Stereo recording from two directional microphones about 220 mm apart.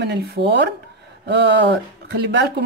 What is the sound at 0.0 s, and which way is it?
Speech, 45° right (ahead or behind).